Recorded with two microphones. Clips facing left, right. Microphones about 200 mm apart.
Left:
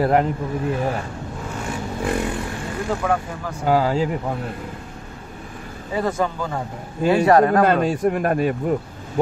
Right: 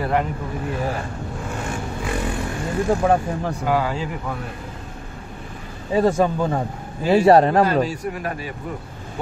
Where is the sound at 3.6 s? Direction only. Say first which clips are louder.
Left 4 dB; 35° left (ahead or behind).